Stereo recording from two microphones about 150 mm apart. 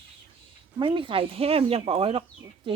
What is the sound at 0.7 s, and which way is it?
A woman's voice, 35° right (ahead or behind).